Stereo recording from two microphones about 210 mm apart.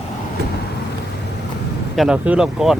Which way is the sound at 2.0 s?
5° right (ahead or behind).